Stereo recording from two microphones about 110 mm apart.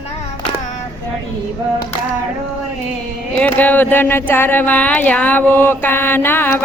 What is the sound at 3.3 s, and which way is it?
Speech, 15° left (ahead or behind).